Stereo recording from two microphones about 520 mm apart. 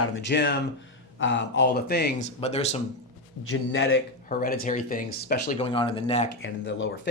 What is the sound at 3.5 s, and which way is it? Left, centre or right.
Speech, left.